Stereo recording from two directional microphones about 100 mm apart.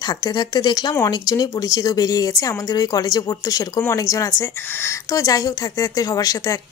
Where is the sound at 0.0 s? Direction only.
40° left (ahead or behind).